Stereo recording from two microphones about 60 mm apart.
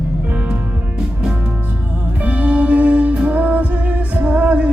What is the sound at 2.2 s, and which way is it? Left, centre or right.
Music, right.